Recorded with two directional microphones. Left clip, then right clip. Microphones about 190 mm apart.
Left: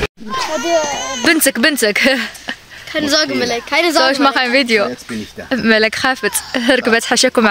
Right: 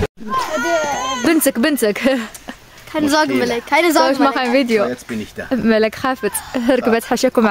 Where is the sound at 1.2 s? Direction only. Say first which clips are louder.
Left 4 dB; 5° right (ahead or behind).